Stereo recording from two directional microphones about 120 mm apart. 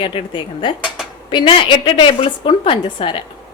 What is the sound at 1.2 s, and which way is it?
A woman's voice, 45° left (ahead or behind).